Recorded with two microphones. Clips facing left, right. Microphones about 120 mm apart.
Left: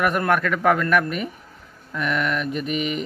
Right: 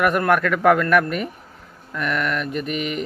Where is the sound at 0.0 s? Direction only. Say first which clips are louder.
Right 2 dB; 25° left (ahead or behind).